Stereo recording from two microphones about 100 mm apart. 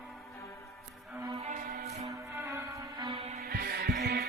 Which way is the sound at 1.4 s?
90° right.